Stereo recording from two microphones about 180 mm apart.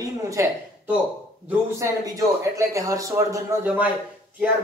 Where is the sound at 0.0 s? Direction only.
15° right (ahead or behind).